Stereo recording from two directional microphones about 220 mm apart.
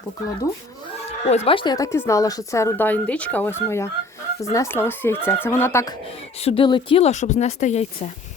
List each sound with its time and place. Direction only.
1.5 s speech: 20° left (ahead or behind)
6.4 s speech: 25° left (ahead or behind)